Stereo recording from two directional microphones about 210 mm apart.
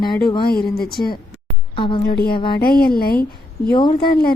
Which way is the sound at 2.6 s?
45° left (ahead or behind).